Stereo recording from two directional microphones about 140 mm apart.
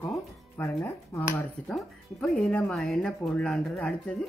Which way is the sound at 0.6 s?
20° left (ahead or behind).